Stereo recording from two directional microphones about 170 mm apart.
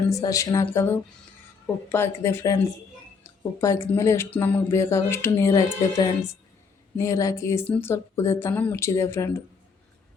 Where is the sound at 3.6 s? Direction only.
15° left (ahead or behind).